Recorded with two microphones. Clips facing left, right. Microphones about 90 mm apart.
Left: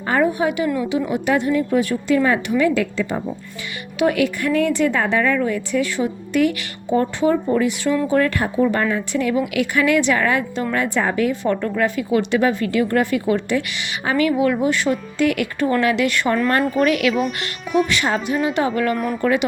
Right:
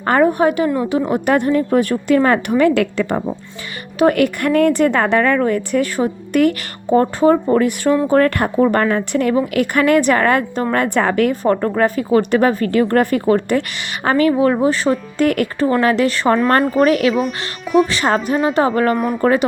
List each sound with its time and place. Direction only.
0.0 s a woman's voice: 55° right (ahead or behind)
3.9 s a woman's voice: 45° right (ahead or behind)
9.3 s a woman's voice: 40° right (ahead or behind)
9.7 s a woman's voice: 50° right (ahead or behind)
11.4 s a woman's voice: 40° right (ahead or behind)
17.2 s speech: centre (ahead or behind)
17.8 s a woman's voice: 40° right (ahead or behind)